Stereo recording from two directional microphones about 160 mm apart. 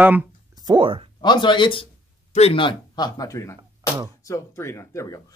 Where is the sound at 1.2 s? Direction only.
30° left (ahead or behind).